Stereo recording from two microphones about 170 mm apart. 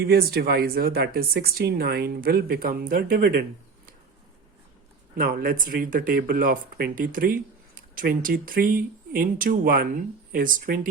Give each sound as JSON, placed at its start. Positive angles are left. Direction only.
{"t": 0.0, "sound": "speech", "side_deg": -65}
{"t": 5.1, "sound": "speech", "side_deg": -60}